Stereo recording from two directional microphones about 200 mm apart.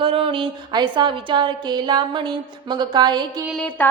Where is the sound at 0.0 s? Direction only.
25° right (ahead or behind).